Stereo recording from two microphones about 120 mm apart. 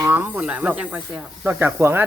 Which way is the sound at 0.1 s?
15° right (ahead or behind).